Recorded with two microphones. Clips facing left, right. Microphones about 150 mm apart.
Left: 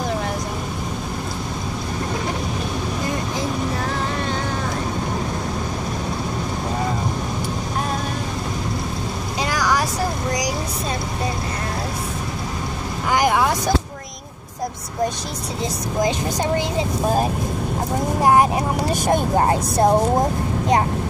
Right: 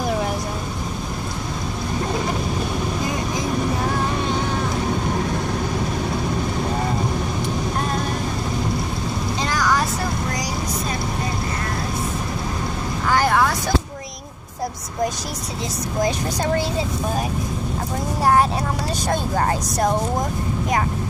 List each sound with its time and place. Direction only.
9.5 s vehicle: 10° left (ahead or behind)
13.1 s vehicle: 15° left (ahead or behind)
16.1 s vehicle: 20° left (ahead or behind)
18.2 s vehicle: 15° left (ahead or behind)